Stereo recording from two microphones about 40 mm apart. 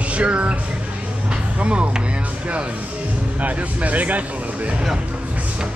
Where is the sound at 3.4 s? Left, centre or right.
Right.